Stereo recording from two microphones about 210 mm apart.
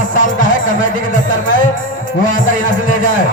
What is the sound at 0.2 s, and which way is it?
Music, 40° left (ahead or behind).